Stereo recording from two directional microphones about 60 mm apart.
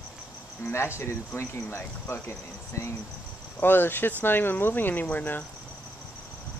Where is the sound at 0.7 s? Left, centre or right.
Left.